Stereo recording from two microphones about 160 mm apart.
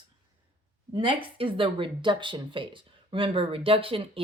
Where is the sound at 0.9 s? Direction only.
35° right (ahead or behind).